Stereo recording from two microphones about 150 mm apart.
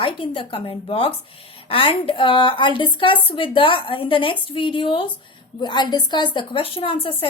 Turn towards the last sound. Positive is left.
turn(degrees=35)  # may be behind; listen again after turning